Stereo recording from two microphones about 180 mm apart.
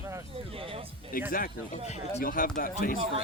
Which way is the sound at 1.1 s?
50° left (ahead or behind).